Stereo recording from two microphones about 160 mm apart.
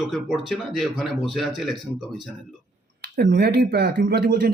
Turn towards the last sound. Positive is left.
turn(degrees=-90)